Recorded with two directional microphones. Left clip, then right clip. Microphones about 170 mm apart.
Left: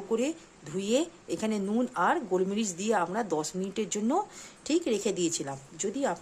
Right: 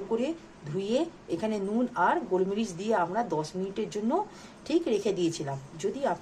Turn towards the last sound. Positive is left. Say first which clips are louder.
# right 1 dB
turn(degrees=30)  # may be behind; listen again after turning